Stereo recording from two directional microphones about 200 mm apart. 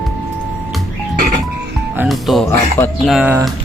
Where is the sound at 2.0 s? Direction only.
Centre (ahead or behind).